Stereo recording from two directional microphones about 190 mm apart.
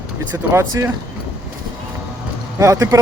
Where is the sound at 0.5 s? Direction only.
15° right (ahead or behind).